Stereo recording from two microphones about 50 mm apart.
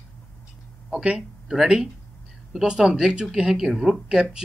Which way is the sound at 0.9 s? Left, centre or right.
Centre.